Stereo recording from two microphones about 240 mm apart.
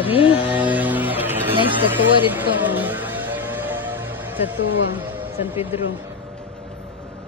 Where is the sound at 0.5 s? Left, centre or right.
Centre.